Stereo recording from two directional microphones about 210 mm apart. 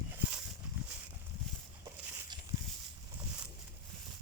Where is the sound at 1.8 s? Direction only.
10° right (ahead or behind).